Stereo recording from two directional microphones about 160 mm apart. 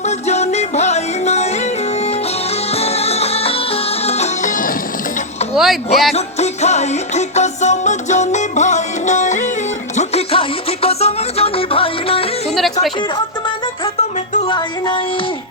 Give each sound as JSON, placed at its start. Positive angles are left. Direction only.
{"t": 0.3, "sound": "music", "side_deg": 45}
{"t": 2.7, "sound": "music", "side_deg": 40}
{"t": 5.5, "sound": "speech", "side_deg": 0}
{"t": 6.1, "sound": "music", "side_deg": 45}
{"t": 14.4, "sound": "music", "side_deg": 30}